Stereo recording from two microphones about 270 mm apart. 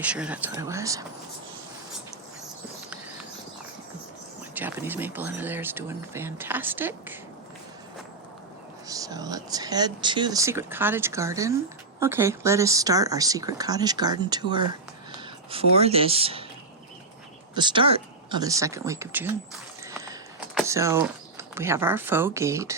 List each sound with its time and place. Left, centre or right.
0.0 s speech: centre
4.5 s speech: centre
8.9 s speech: centre
17.5 s speech: centre
19.9 s a sound: centre
20.7 s speech: centre